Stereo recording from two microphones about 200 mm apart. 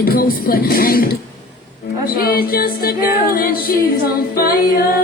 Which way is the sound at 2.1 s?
50° left (ahead or behind).